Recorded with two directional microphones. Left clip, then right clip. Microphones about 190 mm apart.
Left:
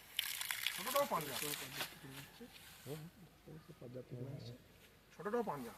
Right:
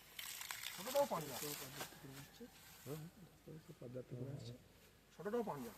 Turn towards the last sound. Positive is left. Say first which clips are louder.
# left 3 dB
turn(degrees=-15)  # may be behind; listen again after turning